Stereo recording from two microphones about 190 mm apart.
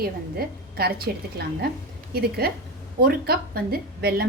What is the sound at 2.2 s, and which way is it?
A woman's voice, 55° right (ahead or behind).